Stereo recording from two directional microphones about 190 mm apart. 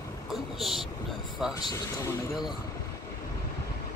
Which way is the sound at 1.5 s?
20° left (ahead or behind).